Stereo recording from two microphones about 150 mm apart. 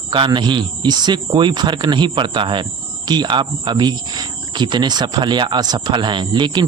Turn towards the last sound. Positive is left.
turn(degrees=-30)  # may be behind; listen again after turning